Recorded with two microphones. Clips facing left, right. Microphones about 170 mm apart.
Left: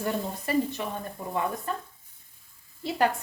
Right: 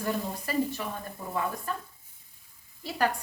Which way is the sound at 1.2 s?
20° left (ahead or behind).